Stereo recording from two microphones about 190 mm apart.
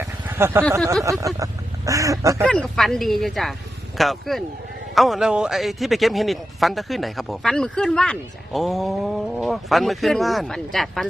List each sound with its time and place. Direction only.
0.0 s a sound: 15° right (ahead or behind)
1.2 s goose: 15° right (ahead or behind)
2.4 s a man's voice: 5° left (ahead or behind)